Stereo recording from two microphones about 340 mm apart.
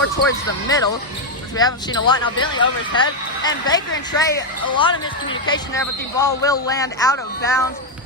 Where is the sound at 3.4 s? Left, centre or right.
Centre.